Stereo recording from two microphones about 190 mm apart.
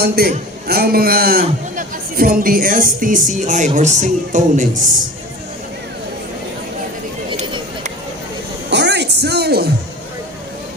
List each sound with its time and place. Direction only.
0.0 s a man's voice: 55° right (ahead or behind)
7.3 s a sound: 25° right (ahead or behind)
8.7 s music: 65° right (ahead or behind)